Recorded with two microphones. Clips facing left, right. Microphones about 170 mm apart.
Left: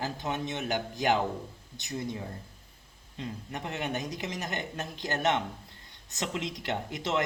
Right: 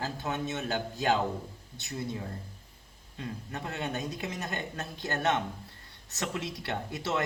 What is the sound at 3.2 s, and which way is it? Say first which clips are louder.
A man's voice: left 1 dB; 20° left (ahead or behind).